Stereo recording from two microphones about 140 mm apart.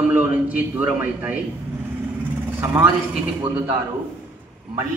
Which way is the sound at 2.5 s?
20° right (ahead or behind).